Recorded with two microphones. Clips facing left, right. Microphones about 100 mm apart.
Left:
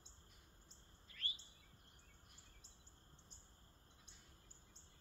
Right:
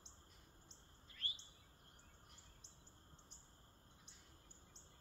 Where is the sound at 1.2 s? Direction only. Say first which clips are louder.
Left 1 dB; 30° right (ahead or behind).